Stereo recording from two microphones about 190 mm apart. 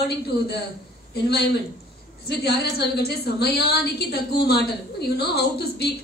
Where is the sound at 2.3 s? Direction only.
60° left (ahead or behind).